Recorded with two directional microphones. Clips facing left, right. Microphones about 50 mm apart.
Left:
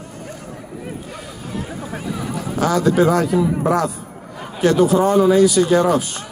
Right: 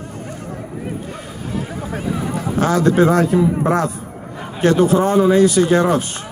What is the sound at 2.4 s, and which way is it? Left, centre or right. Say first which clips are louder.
A man's voice: right 1 dB; right.